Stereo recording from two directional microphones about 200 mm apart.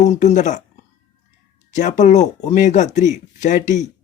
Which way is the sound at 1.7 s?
35° left (ahead or behind).